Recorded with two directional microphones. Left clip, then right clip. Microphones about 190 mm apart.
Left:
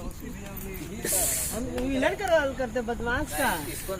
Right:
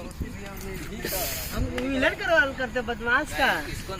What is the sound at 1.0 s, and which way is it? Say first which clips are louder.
Speech: left 1 dB; centre (ahead or behind).